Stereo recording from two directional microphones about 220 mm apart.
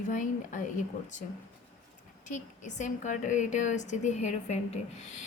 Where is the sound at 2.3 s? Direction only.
35° left (ahead or behind).